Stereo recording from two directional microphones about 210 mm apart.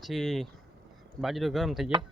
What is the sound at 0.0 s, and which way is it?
Speech, centre (ahead or behind).